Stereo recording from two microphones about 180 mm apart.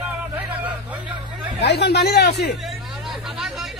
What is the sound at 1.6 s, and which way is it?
Speech, 65° left (ahead or behind).